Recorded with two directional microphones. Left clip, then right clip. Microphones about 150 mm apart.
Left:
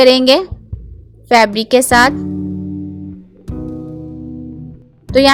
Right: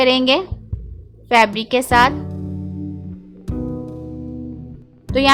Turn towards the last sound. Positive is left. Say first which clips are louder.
# left 8 dB
turn(degrees=0)  # may be behind; listen again after turning